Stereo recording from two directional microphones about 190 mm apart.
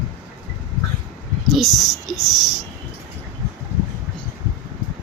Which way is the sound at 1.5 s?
Centre (ahead or behind).